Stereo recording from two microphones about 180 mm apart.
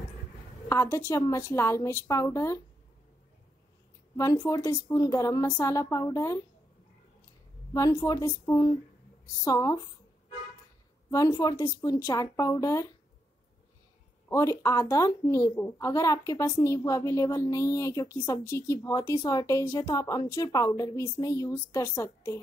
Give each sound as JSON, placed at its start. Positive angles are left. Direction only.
{"t": 0.7, "sound": "a woman's voice", "side_deg": 15}
{"t": 4.2, "sound": "a woman's voice", "side_deg": 15}
{"t": 7.7, "sound": "speech", "side_deg": 20}
{"t": 11.1, "sound": "speech", "side_deg": 20}
{"t": 14.3, "sound": "a woman's voice", "side_deg": 15}